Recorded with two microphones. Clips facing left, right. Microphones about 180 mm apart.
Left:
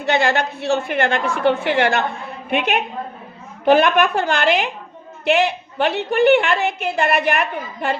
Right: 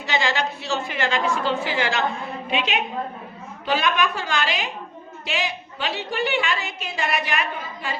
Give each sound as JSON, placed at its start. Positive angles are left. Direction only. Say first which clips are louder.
{"t": 0.0, "sound": "a woman's voice", "louder": "left 6 dB", "side_deg": 60}